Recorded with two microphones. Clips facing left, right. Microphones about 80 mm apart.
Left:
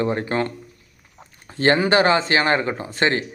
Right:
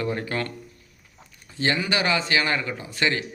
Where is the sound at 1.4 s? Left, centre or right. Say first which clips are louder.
Left 7 dB; left.